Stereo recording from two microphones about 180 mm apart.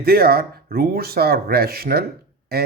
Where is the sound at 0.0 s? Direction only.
60° right (ahead or behind).